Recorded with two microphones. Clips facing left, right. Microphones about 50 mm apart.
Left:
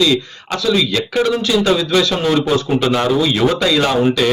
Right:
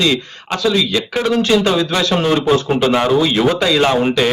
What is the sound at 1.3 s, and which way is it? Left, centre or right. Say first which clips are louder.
A man's voice: right 1 dB; right.